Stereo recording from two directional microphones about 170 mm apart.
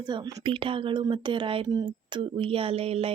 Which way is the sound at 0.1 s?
30° right (ahead or behind).